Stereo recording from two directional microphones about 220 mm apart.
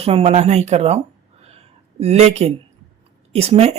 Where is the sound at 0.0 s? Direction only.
25° right (ahead or behind).